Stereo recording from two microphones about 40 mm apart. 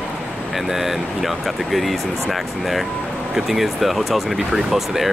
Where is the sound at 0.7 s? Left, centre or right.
Centre.